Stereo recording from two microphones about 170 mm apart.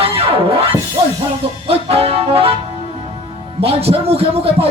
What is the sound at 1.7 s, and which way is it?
Music, 35° right (ahead or behind).